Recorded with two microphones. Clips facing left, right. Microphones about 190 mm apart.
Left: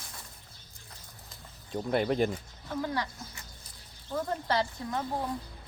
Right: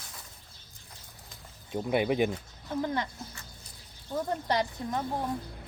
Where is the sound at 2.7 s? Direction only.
20° right (ahead or behind).